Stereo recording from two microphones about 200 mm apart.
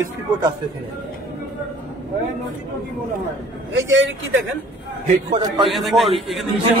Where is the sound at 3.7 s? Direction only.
70° right (ahead or behind).